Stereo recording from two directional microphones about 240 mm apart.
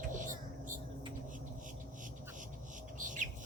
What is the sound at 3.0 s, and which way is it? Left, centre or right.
Bird, right.